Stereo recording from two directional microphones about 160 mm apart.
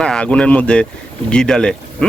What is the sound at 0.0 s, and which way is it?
Speech, 5° left (ahead or behind).